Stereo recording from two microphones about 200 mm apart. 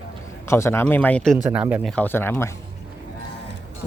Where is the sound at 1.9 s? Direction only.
10° left (ahead or behind).